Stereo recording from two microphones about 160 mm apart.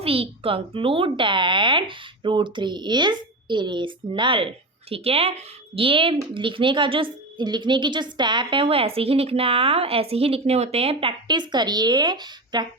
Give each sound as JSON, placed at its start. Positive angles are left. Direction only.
{"t": 0.0, "sound": "a woman's voice", "side_deg": -35}